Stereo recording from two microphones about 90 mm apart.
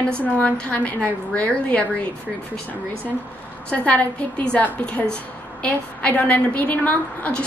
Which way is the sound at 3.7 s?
15° left (ahead or behind).